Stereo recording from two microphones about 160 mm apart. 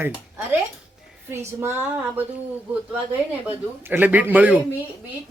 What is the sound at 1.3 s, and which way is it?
Speech, 15° right (ahead or behind).